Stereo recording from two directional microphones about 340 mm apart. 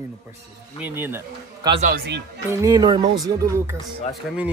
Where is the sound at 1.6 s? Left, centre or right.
Centre.